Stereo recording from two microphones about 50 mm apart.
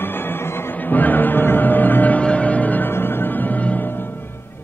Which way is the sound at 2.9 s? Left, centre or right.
Left.